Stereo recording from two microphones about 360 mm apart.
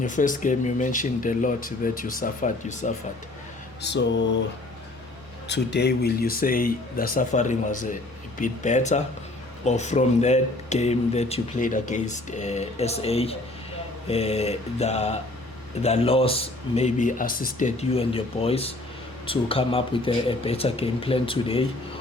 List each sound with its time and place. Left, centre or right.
0.0 s speech: left
5.5 s speech: left